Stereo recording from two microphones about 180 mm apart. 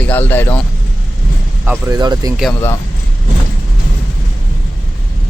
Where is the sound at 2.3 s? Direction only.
Centre (ahead or behind).